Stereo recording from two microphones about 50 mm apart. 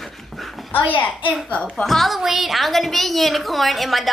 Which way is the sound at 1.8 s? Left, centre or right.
Centre.